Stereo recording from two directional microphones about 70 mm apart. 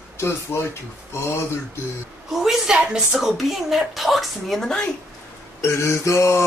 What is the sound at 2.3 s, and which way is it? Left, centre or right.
Speech, centre.